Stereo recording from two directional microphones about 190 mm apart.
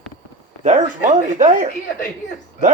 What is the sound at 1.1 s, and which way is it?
Speech, 40° right (ahead or behind).